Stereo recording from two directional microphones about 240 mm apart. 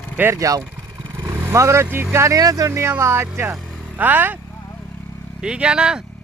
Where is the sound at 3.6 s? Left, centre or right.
Centre.